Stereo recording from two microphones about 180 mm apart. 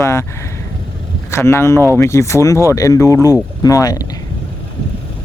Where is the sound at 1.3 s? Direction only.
15° left (ahead or behind).